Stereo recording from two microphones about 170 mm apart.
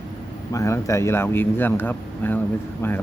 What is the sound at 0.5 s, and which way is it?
Speech, 20° left (ahead or behind).